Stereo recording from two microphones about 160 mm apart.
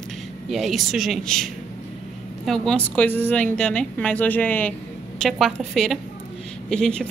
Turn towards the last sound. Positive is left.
turn(degrees=5)  # may be behind; listen again after turning